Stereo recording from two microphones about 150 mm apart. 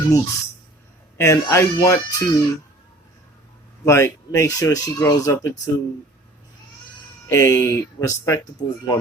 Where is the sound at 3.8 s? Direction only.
20° left (ahead or behind).